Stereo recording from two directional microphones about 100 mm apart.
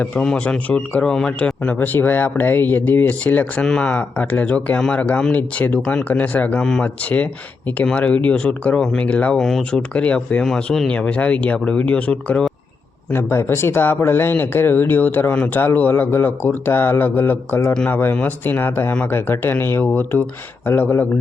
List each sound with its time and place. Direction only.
0.0 s a man's voice: 10° left (ahead or behind)
13.1 s speech: 25° left (ahead or behind)